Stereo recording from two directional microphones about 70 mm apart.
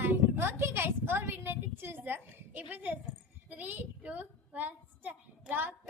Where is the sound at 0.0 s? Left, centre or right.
Right.